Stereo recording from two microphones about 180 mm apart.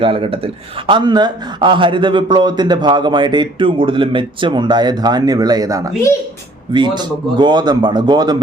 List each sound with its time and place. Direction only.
0.0 s speech: 30° right (ahead or behind)